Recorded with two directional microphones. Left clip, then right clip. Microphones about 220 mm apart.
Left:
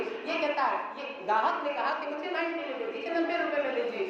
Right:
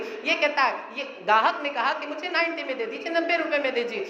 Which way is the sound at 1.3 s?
50° right (ahead or behind).